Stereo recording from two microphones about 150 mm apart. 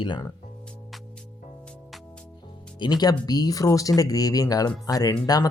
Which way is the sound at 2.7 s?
30° left (ahead or behind).